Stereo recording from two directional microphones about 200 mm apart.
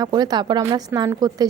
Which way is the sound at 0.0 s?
20° right (ahead or behind).